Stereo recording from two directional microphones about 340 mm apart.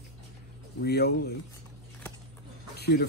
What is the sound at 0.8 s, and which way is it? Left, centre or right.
Speech, left.